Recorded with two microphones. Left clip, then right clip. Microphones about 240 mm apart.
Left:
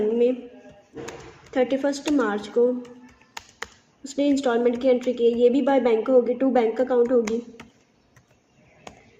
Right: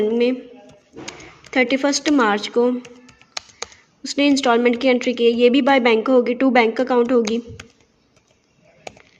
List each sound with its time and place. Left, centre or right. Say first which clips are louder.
1.5 s a woman's voice: right 5 dB; right
4.0 s a woman's voice: right 5 dB; right